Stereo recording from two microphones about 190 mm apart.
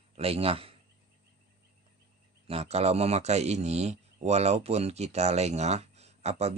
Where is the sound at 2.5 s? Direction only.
35° right (ahead or behind).